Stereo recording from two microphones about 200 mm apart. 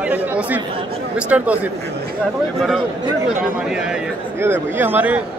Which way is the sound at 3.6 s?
5° right (ahead or behind).